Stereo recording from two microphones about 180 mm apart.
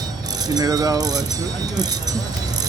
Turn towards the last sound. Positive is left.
turn(degrees=-20)  # may be behind; listen again after turning